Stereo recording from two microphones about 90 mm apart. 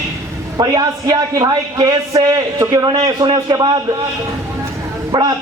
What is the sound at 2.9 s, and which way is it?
Speech, 70° right (ahead or behind).